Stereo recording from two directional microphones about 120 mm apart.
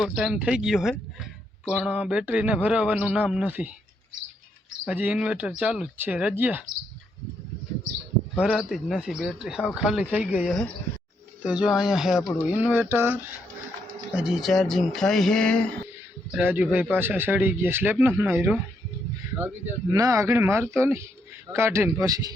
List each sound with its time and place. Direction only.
0.0 s speech: 5° right (ahead or behind)
4.9 s speech: 10° right (ahead or behind)
8.4 s speech: 5° right (ahead or behind)
12.5 s speech: 15° right (ahead or behind)
14.1 s speech: 5° right (ahead or behind); by 15.8 s 10° left (ahead or behind)
16.3 s speech: 15° right (ahead or behind); by 22.4 s 30° right (ahead or behind)